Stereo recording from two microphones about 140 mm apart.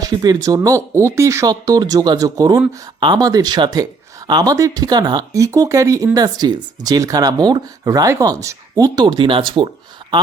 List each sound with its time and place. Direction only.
0.0 s speech: 25° right (ahead or behind)